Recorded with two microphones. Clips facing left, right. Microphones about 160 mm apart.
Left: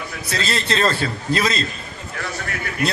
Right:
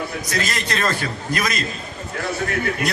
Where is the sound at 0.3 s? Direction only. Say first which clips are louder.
Left 5 dB; 30° left (ahead or behind).